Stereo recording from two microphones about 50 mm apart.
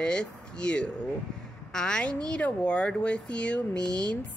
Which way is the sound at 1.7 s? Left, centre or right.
Centre.